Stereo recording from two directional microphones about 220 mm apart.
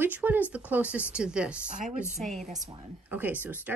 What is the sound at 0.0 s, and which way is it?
Speech, 10° right (ahead or behind).